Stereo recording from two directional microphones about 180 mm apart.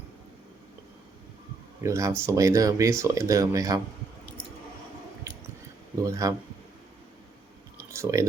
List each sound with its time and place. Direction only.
1.8 s speech: 15° right (ahead or behind)
6.0 s speech: 20° right (ahead or behind)
7.9 s a sound: 15° right (ahead or behind)